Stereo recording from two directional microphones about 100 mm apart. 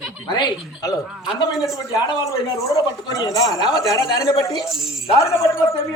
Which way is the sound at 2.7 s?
35° left (ahead or behind).